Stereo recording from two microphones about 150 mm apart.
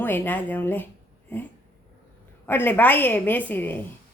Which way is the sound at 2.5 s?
15° left (ahead or behind).